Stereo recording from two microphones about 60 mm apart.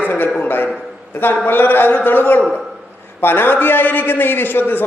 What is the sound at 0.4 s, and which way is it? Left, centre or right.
A man's voice, left.